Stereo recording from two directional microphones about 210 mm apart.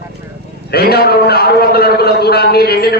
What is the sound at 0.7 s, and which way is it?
A man's voice, 50° left (ahead or behind).